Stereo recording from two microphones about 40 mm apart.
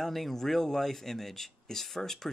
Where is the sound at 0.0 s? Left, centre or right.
Centre.